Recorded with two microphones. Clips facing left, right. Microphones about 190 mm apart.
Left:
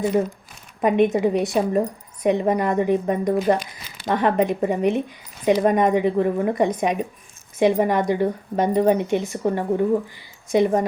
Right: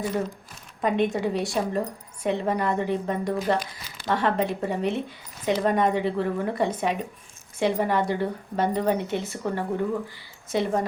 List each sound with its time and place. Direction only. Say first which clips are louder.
0.8 s speech: left 6 dB; 20° left (ahead or behind)